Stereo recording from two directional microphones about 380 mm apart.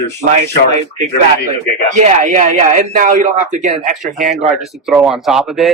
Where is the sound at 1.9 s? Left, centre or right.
Centre.